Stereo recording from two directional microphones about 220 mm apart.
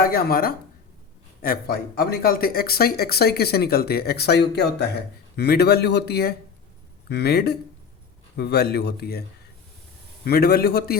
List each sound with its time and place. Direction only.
0.0 s speech: 40° left (ahead or behind)
10.2 s speech: 45° left (ahead or behind)